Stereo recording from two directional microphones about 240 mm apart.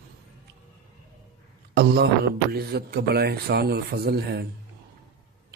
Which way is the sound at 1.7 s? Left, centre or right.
Right.